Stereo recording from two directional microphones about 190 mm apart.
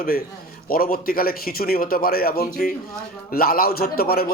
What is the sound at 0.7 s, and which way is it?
A man's voice, 50° left (ahead or behind).